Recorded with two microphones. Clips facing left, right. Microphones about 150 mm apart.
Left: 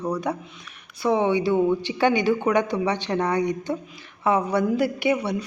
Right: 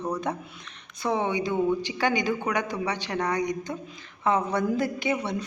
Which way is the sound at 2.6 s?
10° right (ahead or behind).